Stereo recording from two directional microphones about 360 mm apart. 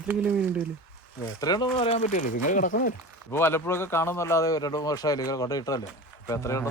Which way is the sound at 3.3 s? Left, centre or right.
Centre.